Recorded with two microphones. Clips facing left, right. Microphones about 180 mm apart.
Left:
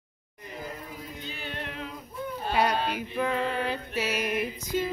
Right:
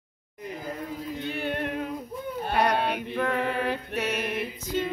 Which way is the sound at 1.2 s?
60° right (ahead or behind).